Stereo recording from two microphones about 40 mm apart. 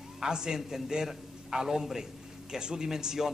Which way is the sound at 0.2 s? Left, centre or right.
Centre.